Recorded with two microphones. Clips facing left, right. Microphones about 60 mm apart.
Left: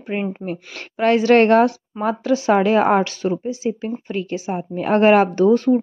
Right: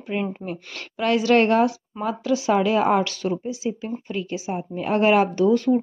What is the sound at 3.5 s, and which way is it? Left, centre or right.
A woman's voice, left.